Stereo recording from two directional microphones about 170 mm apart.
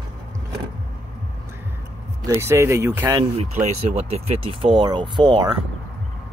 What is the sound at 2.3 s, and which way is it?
Speech, 15° right (ahead or behind).